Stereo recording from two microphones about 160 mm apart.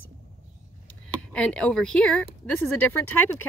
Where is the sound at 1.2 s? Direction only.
5° left (ahead or behind).